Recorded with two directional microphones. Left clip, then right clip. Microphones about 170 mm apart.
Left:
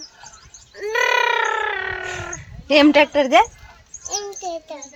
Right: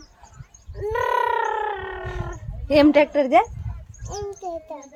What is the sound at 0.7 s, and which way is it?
Grunt, 25° right (ahead or behind).